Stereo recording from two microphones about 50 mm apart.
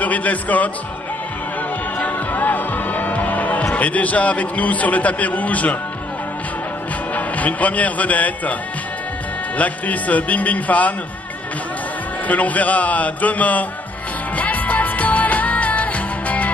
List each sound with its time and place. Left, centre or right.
0.0 s speech: left
2.0 s music: left
3.7 s a man's voice: left
7.2 s speech: left
9.6 s speech: left
12.3 s speech: left
14.3 s music: left